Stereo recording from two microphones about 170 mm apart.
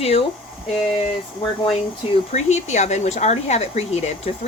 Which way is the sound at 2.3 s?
40° left (ahead or behind).